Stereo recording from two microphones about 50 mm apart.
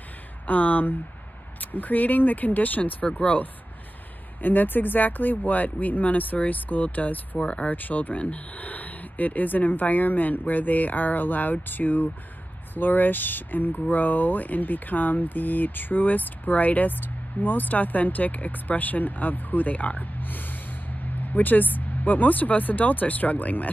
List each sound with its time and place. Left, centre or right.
0.5 s speech: left
3.1 s speech: left
4.4 s speech: left